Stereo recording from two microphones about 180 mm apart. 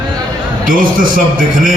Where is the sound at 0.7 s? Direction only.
50° right (ahead or behind).